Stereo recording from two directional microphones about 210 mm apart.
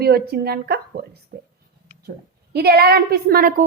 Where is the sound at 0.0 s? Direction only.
50° right (ahead or behind).